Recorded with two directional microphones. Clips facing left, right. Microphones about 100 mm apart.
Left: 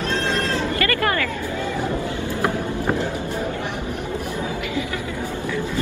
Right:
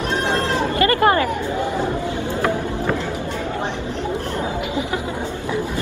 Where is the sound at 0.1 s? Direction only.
20° right (ahead or behind).